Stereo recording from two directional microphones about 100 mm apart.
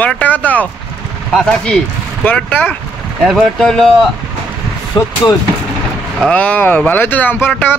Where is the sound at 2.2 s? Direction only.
15° left (ahead or behind).